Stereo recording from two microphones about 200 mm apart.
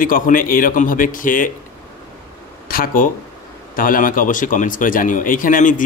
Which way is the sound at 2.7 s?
45° left (ahead or behind).